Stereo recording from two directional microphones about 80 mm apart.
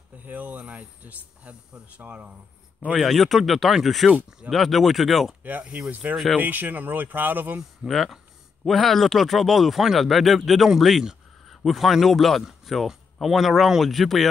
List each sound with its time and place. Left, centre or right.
0.2 s speech: centre
3.0 s speech: centre
4.1 s speech: centre
4.5 s speech: centre
5.4 s speech: right
7.8 s speech: centre